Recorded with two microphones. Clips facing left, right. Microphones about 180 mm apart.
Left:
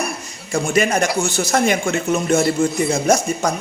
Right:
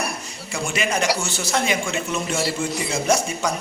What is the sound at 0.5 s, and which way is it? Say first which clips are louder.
A man's voice: left 7 dB; 45° left (ahead or behind).